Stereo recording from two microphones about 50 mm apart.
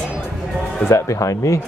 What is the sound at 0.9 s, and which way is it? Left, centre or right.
Speech, left.